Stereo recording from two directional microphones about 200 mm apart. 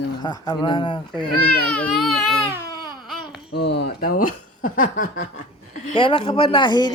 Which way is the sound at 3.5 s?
60° left (ahead or behind).